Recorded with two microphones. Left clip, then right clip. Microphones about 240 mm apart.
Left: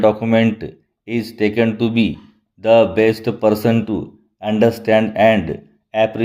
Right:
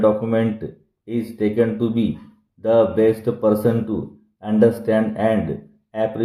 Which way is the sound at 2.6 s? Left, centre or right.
Left.